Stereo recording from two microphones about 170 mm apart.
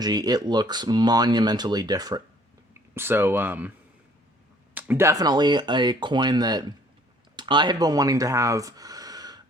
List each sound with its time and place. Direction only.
0.0 s speech: 25° right (ahead or behind)
2.9 s speech: 10° right (ahead or behind)
4.7 s speech: 10° right (ahead or behind)